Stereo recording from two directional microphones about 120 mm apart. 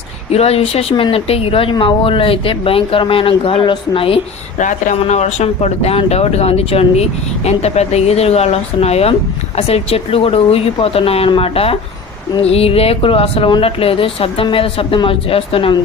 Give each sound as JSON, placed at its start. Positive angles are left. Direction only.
{"t": 0.3, "sound": "speech", "side_deg": 60}
{"t": 4.5, "sound": "speech", "side_deg": 90}